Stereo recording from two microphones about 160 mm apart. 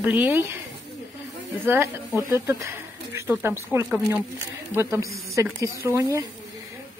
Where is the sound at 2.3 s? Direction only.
15° right (ahead or behind).